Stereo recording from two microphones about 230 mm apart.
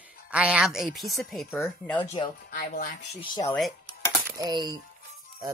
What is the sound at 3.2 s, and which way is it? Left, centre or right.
Speech, centre.